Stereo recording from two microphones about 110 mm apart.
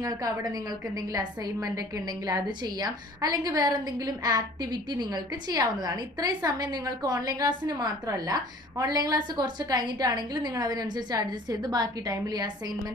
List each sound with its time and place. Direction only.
0.0 s a woman's voice: 35° right (ahead or behind)